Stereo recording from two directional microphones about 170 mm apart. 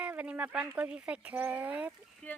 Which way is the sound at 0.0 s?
10° right (ahead or behind).